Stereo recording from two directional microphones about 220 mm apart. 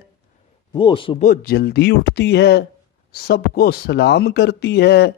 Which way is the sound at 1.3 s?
45° left (ahead or behind).